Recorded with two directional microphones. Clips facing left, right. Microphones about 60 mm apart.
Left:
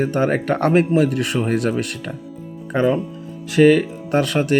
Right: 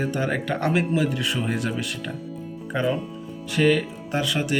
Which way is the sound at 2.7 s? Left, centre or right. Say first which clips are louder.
Left 6 dB; left.